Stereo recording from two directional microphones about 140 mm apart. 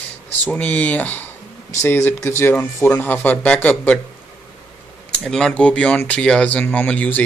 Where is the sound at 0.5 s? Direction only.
10° left (ahead or behind).